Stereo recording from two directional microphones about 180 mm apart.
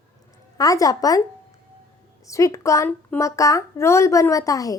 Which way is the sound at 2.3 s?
15° left (ahead or behind).